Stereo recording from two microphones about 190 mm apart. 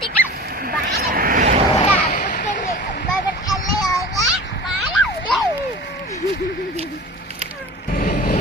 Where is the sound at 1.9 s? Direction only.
45° left (ahead or behind).